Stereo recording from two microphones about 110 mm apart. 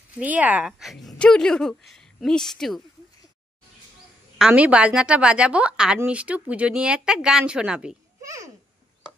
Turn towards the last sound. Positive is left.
turn(degrees=-10)  # may be behind; listen again after turning